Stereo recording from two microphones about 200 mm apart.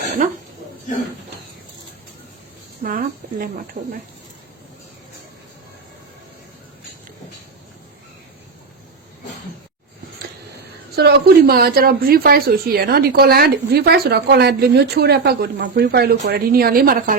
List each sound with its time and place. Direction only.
0.0 s a sound: 40° right (ahead or behind)
2.8 s speech: 45° right (ahead or behind)
10.9 s speech: 55° right (ahead or behind)